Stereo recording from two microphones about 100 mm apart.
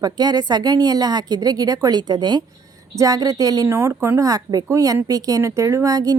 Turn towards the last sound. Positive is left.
turn(degrees=-35)  # may be behind; listen again after turning